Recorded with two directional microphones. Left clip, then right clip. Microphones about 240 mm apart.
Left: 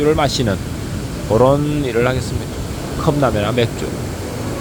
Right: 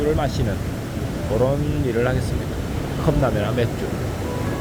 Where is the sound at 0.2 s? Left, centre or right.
Centre.